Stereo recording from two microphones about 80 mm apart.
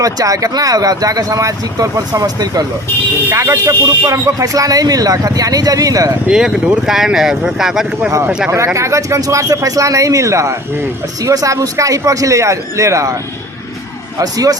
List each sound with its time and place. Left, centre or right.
0.0 s speech: right
3.3 s speech: right
6.2 s speech: centre
8.4 s speech: right
14.2 s speech: right